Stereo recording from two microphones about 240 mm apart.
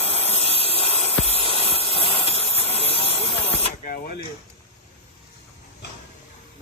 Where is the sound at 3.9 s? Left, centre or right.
Left.